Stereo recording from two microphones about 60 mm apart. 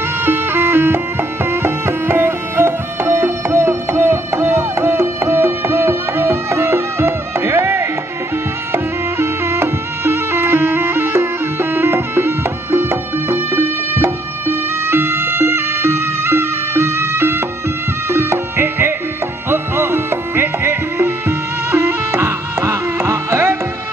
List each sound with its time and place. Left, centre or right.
0.2 s music: right